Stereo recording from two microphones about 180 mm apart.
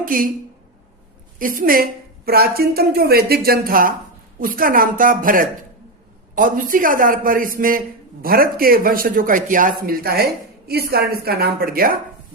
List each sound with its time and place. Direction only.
0.0 s a woman's voice: 50° right (ahead or behind)
1.4 s a woman's voice: 50° right (ahead or behind)